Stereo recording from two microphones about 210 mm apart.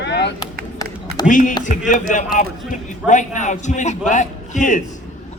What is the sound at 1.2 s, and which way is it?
A man's voice, 40° left (ahead or behind).